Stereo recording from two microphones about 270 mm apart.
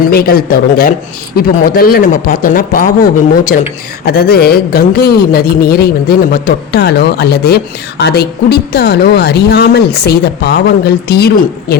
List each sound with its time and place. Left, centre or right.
0.1 s speech: left